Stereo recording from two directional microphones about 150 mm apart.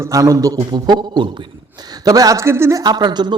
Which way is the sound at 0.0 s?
20° right (ahead or behind).